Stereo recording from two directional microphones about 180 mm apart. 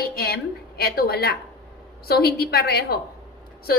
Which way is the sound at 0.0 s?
60° left (ahead or behind).